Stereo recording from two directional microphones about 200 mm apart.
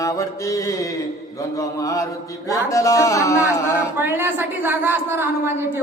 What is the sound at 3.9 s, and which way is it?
A woman's voice, 10° right (ahead or behind).